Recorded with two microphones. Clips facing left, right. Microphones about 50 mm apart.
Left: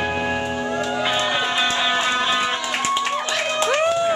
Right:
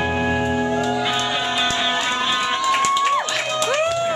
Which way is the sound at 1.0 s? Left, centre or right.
Centre.